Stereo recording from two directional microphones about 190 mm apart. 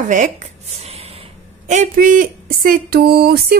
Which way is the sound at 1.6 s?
40° right (ahead or behind).